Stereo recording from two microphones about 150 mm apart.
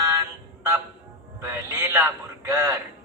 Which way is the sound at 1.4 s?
20° right (ahead or behind).